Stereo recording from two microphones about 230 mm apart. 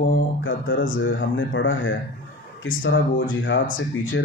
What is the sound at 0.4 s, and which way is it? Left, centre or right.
Speech, left.